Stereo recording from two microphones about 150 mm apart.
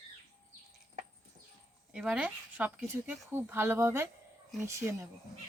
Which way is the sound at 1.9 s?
5° right (ahead or behind).